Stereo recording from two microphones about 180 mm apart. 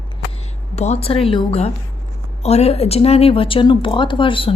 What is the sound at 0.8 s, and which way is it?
A woman's voice, 35° left (ahead or behind).